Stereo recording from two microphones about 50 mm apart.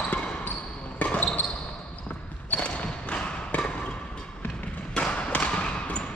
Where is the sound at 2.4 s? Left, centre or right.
Left.